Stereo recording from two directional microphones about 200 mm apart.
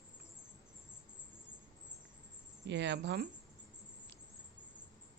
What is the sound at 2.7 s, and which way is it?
Speech, 60° right (ahead or behind).